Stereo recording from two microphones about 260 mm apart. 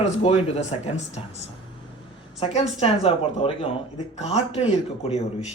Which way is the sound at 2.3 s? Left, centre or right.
Left.